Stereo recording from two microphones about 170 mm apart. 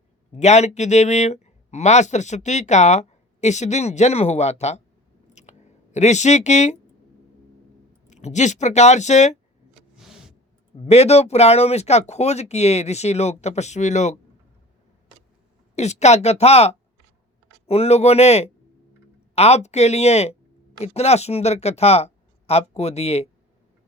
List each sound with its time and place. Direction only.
0.3 s speech: 40° left (ahead or behind)
5.3 s chewing: 40° left (ahead or behind)
8.1 s speech: 45° left (ahead or behind)
10.0 s vehicle: 5° right (ahead or behind)
10.8 s speech: 40° left (ahead or behind)
15.7 s speech: 40° left (ahead or behind)